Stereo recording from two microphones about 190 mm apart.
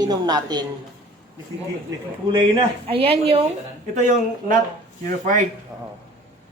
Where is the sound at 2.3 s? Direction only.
25° right (ahead or behind).